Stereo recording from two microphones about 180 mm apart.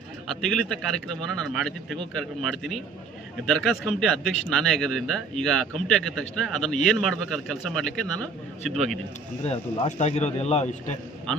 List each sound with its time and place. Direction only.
0.7 s a man's voice: 5° left (ahead or behind)
9.4 s speech: 35° left (ahead or behind)